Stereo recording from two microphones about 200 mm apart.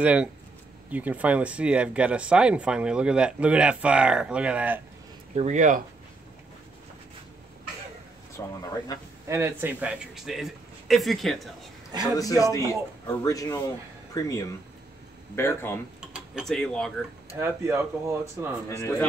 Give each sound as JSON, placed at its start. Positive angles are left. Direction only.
{"t": 0.0, "sound": "speech", "side_deg": -5}
{"t": 5.3, "sound": "speech", "side_deg": -35}
{"t": 8.4, "sound": "a man's voice", "side_deg": 15}
{"t": 9.3, "sound": "speech", "side_deg": -10}
{"t": 12.2, "sound": "a man's voice", "side_deg": 15}
{"t": 15.3, "sound": "a man's voice", "side_deg": 10}
{"t": 16.0, "sound": "cutlery", "side_deg": -5}
{"t": 17.4, "sound": "speech", "side_deg": -10}
{"t": 18.7, "sound": "a man's voice", "side_deg": 15}